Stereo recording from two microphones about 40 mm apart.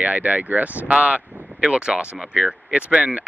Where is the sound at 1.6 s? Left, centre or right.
Right.